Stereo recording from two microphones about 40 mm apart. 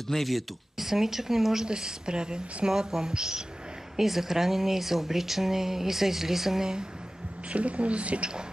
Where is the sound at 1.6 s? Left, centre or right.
Right.